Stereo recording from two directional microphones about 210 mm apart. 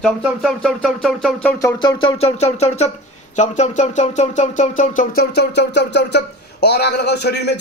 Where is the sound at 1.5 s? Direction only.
20° left (ahead or behind); by 4.7 s 35° left (ahead or behind).